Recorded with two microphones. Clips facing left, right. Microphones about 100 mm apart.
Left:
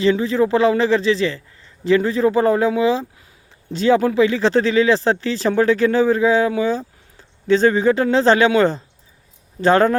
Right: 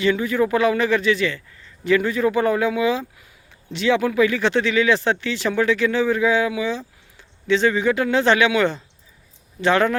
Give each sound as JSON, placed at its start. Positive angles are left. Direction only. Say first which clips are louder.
{"t": 0.0, "sound": "speech", "louder": "left 3 dB", "side_deg": 30}